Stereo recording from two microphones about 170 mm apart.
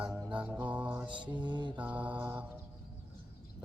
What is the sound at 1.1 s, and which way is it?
Mantra, 30° right (ahead or behind).